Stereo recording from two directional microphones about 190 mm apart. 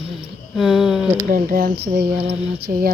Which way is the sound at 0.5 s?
Centre (ahead or behind).